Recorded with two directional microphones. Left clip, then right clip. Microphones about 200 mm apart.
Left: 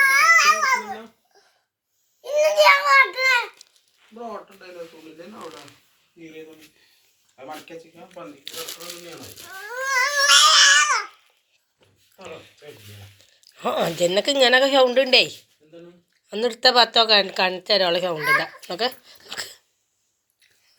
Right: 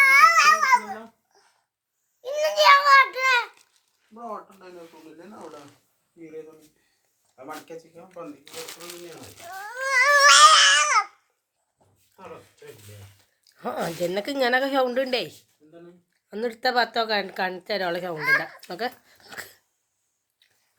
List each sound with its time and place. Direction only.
0.0 s babbling: 25° right (ahead or behind)
2.2 s a sound: 30° right (ahead or behind)
9.7 s a sound: 25° right (ahead or behind)
10.2 s babbling: 25° right (ahead or behind)
13.6 s a woman's voice: centre (ahead or behind)
18.7 s dog: 10° right (ahead or behind)